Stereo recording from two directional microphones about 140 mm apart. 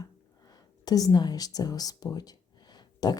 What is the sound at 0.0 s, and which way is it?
Speech, 30° left (ahead or behind).